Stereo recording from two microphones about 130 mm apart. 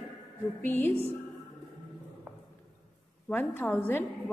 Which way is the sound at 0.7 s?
15° left (ahead or behind).